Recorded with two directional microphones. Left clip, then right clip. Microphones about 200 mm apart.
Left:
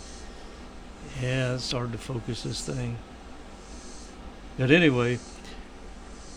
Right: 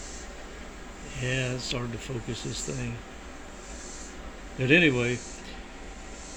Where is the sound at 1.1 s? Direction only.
30° left (ahead or behind).